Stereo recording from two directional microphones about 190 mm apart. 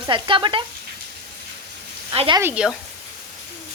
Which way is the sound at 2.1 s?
30° right (ahead or behind).